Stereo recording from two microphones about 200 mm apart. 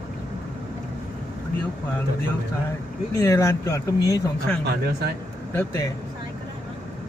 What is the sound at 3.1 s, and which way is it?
Speech, 15° left (ahead or behind).